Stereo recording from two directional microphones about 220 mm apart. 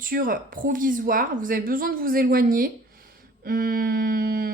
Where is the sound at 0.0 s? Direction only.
40° right (ahead or behind).